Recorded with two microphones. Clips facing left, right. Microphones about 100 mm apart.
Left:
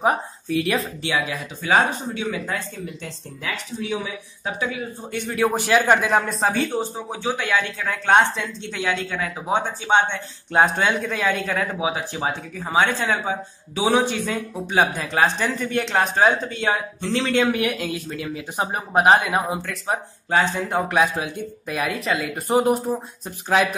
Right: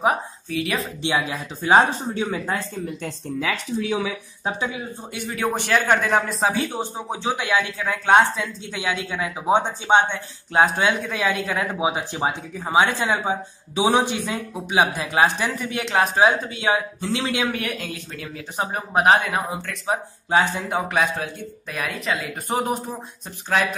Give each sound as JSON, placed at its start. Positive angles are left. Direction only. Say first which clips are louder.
{"t": 0.0, "sound": "a woman's voice", "louder": "even", "side_deg": 0}
{"t": 1.0, "sound": "speech", "louder": "right 1 dB", "side_deg": -25}
{"t": 4.5, "sound": "speech", "louder": "even", "side_deg": -25}
{"t": 5.1, "sound": "speech", "louder": "left 3 dB", "side_deg": -5}
{"t": 6.5, "sound": "speech", "louder": "left 2 dB", "side_deg": -15}
{"t": 7.8, "sound": "speech", "louder": "right 1 dB", "side_deg": -5}
{"t": 9.5, "sound": "speech", "louder": "right 3 dB", "side_deg": -20}
{"t": 17.5, "sound": "speech", "louder": "left 5 dB", "side_deg": 5}